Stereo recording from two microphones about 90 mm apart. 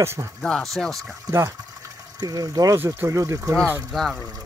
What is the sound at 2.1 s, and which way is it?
Speech, 45° right (ahead or behind).